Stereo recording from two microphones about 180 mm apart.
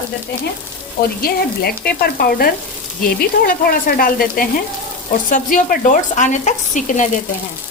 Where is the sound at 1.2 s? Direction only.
55° left (ahead or behind).